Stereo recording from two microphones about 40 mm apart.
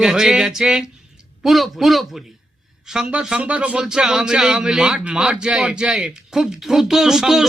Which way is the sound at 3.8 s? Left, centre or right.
Centre.